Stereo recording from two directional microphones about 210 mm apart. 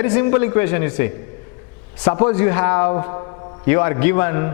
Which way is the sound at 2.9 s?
25° left (ahead or behind).